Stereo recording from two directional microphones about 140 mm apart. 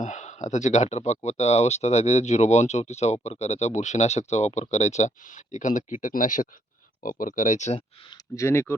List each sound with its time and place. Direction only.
0.0 s speech: 60° left (ahead or behind)
8.1 s speech: 20° left (ahead or behind)